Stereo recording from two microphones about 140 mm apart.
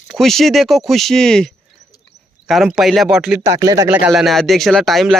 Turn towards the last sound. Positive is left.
turn(degrees=0)  # may be behind; listen again after turning